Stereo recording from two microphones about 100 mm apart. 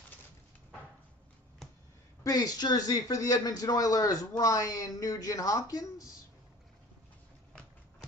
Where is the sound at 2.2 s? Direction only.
40° left (ahead or behind).